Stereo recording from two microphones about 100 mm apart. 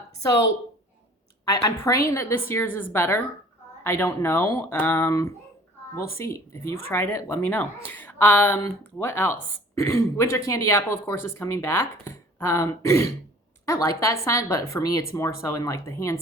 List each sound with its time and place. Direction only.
1.5 s speech: 35° left (ahead or behind)